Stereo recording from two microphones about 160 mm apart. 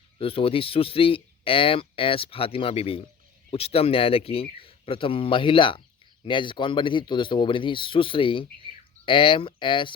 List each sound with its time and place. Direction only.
0.2 s speech: 35° left (ahead or behind)